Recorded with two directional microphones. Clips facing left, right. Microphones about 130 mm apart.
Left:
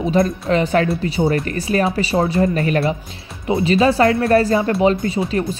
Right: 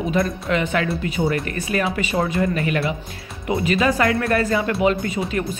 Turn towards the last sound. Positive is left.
turn(degrees=30)  # may be behind; listen again after turning